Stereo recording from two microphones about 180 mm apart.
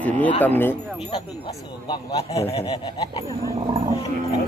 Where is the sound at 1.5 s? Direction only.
25° left (ahead or behind).